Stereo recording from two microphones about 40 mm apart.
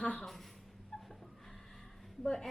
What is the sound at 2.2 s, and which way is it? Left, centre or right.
Speech, centre.